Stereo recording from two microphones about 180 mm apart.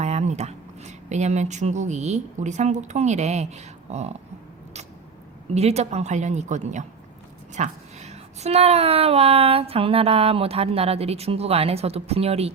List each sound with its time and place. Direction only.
0.0 s speech: 40° right (ahead or behind)
5.5 s speech: 35° right (ahead or behind)